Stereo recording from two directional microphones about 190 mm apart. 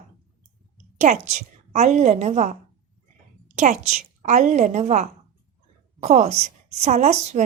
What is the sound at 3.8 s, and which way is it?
A woman's voice, 40° right (ahead or behind).